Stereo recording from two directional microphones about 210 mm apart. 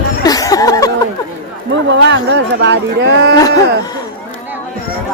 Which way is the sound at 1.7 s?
60° right (ahead or behind).